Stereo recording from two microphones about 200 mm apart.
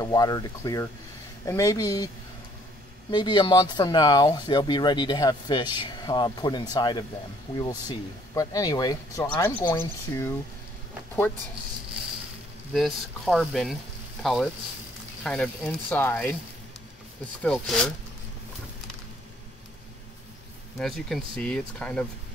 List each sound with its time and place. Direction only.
0.0 s speech: 20° left (ahead or behind)
3.1 s speech: 20° left (ahead or behind)
8.4 s speech: 20° left (ahead or behind)
12.7 s speech: centre (ahead or behind)
17.4 s speech: 5° left (ahead or behind)
20.8 s speech: centre (ahead or behind)